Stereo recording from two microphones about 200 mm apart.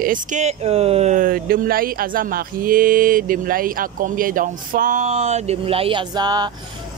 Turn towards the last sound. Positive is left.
turn(degrees=-20)  # may be behind; listen again after turning